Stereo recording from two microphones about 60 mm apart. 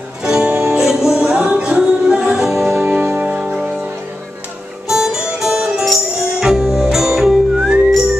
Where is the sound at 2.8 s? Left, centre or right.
Right.